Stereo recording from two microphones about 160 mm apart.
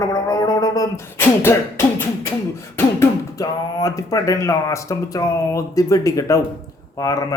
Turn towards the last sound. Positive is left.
turn(degrees=20)  # may be behind; listen again after turning